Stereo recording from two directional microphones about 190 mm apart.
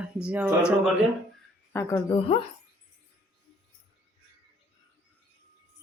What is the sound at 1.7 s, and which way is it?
Speech, 10° left (ahead or behind).